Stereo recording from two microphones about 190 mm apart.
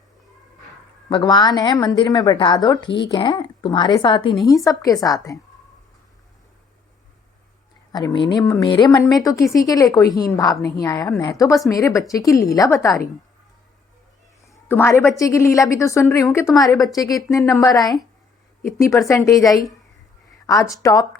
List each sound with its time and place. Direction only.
1.1 s a woman's voice: 25° left (ahead or behind)
7.9 s a woman's voice: 20° left (ahead or behind)
14.5 s a woman's voice: 15° left (ahead or behind)
19.0 s a woman's voice: 15° left (ahead or behind)